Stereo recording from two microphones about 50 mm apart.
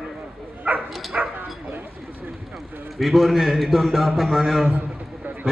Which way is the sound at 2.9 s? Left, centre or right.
Centre.